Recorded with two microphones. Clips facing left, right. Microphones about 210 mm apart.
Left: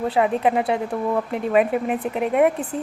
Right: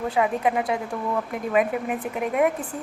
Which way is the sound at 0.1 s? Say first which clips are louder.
Left 3 dB; 35° left (ahead or behind).